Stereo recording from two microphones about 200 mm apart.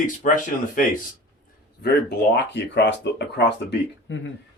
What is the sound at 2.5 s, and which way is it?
Speech, 60° left (ahead or behind).